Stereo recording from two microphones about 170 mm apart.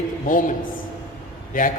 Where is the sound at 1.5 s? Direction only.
55° left (ahead or behind).